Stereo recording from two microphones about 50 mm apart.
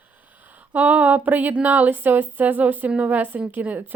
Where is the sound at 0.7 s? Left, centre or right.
Right.